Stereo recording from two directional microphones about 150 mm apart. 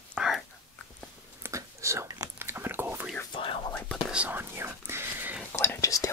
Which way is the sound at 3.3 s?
35° left (ahead or behind).